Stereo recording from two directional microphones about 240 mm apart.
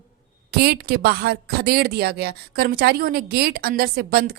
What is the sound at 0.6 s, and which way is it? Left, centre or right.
A woman's voice, right.